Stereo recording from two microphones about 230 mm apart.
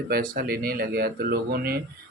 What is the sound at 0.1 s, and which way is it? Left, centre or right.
Speech, right.